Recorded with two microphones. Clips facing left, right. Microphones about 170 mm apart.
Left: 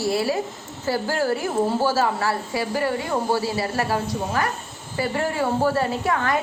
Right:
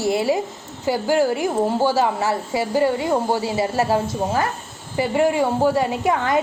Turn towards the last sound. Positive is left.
turn(degrees=-20)  # may be behind; listen again after turning